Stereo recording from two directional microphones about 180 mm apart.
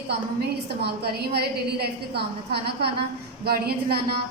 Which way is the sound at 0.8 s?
65° right (ahead or behind).